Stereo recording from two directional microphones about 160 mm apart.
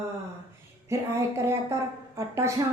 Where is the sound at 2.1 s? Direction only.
15° right (ahead or behind).